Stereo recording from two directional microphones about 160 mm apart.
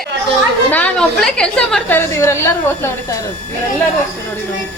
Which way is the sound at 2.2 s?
15° left (ahead or behind).